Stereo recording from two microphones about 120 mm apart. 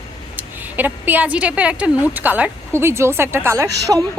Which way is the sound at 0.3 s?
15° right (ahead or behind).